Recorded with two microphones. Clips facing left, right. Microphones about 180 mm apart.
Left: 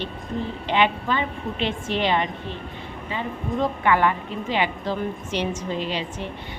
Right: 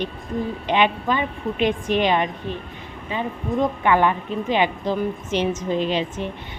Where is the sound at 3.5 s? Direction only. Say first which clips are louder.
Right 2 dB; 20° right (ahead or behind).